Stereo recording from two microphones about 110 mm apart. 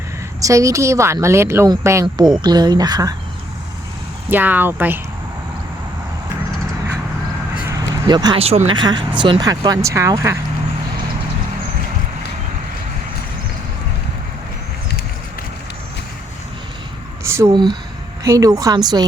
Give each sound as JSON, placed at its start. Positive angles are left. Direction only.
{"t": 0.3, "sound": "a woman's voice", "side_deg": -30}
{"t": 2.4, "sound": "speech", "side_deg": -40}
{"t": 4.3, "sound": "speech", "side_deg": -15}
{"t": 7.7, "sound": "a sound", "side_deg": -35}
{"t": 8.4, "sound": "speech", "side_deg": -65}
{"t": 8.7, "sound": "speech", "side_deg": -45}
{"t": 17.2, "sound": "a sound", "side_deg": -25}
{"t": 17.5, "sound": "speech", "side_deg": -40}
{"t": 18.2, "sound": "speech", "side_deg": -30}